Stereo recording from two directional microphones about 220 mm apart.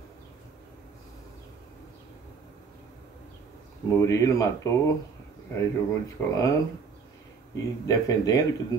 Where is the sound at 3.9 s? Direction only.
15° left (ahead or behind).